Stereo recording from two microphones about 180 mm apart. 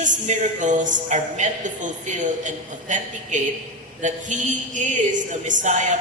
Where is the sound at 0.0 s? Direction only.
45° right (ahead or behind).